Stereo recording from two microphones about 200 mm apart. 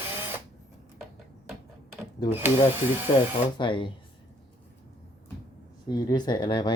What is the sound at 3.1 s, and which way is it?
Speech, 20° left (ahead or behind).